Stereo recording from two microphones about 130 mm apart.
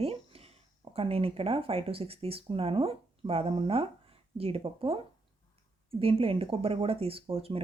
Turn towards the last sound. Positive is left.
turn(degrees=-45)  # may be behind; listen again after turning